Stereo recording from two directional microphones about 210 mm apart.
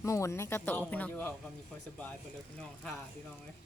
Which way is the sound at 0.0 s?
15° left (ahead or behind).